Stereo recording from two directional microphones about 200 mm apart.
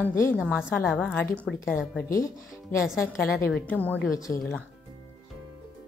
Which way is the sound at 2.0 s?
15° left (ahead or behind).